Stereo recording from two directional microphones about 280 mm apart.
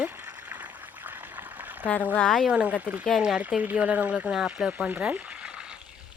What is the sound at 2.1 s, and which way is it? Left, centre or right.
Speech, centre.